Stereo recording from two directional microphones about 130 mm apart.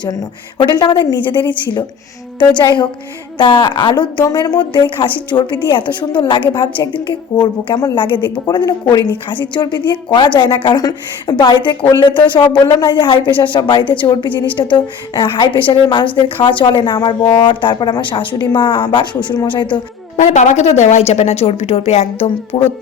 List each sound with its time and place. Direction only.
0.6 s speech: 35° left (ahead or behind)
2.6 s speech: 35° left (ahead or behind)
20.1 s a woman's voice: 65° left (ahead or behind)
22.5 s speech: 45° left (ahead or behind)